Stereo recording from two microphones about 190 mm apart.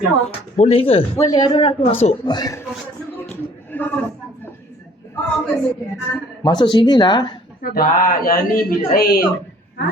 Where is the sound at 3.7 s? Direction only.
10° left (ahead or behind).